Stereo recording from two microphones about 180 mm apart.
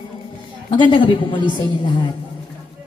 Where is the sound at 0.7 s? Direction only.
25° left (ahead or behind).